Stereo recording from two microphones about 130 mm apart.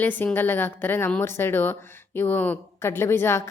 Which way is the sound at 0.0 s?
15° left (ahead or behind).